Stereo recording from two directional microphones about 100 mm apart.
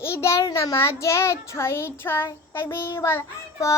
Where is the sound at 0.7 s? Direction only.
25° left (ahead or behind).